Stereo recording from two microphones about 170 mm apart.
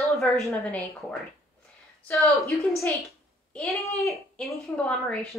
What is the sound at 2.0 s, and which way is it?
Speech, 15° left (ahead or behind).